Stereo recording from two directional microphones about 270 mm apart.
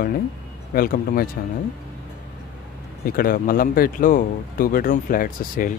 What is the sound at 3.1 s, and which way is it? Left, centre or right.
Speech, left.